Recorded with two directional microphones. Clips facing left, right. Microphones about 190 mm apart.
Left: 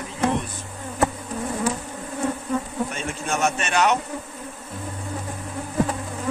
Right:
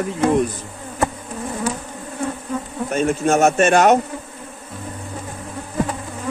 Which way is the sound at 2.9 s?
45° right (ahead or behind).